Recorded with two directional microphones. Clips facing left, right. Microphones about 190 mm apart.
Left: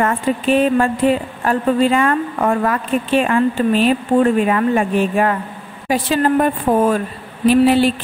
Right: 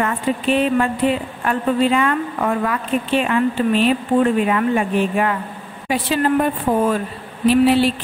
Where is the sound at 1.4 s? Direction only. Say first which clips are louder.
Left 2 dB; 45° left (ahead or behind).